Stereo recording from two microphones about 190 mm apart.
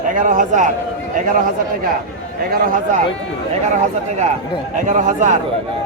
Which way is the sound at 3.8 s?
35° right (ahead or behind).